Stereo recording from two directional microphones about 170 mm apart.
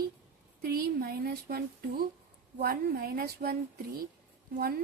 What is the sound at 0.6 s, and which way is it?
A woman's voice, 65° right (ahead or behind).